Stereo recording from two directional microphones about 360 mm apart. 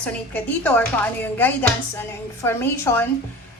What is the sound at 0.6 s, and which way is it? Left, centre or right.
A woman's voice, centre.